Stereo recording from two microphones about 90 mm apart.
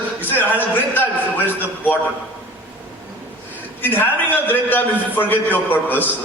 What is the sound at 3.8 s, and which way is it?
A man's voice, 20° left (ahead or behind).